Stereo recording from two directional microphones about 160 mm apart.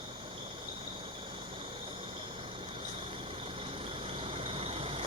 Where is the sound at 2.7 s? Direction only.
35° right (ahead or behind).